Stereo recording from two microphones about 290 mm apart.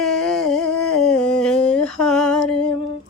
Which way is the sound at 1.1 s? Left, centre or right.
Centre.